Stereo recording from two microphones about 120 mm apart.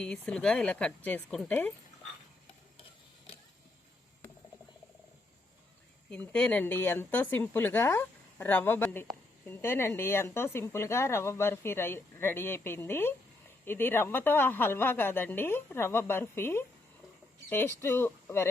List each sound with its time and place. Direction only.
0.0 s speech: 5° left (ahead or behind)
6.1 s speech: 10° left (ahead or behind)